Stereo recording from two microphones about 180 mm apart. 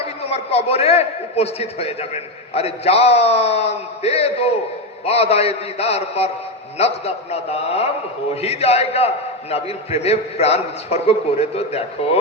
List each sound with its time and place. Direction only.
0.0 s a man's voice: 35° left (ahead or behind)